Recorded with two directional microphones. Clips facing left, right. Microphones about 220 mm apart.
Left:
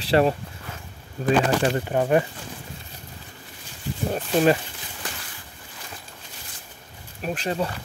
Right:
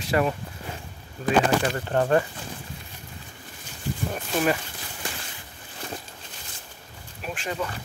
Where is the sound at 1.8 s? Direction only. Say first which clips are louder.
Left 1 dB; 10° left (ahead or behind).